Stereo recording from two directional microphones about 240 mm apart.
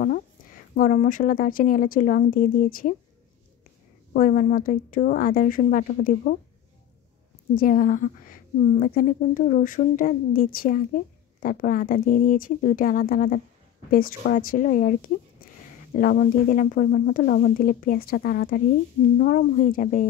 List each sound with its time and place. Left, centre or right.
0.7 s a woman's voice: left
4.1 s a woman's voice: left
7.5 s a woman's voice: left